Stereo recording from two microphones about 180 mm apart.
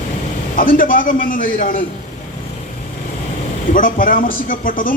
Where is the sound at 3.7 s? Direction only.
50° left (ahead or behind).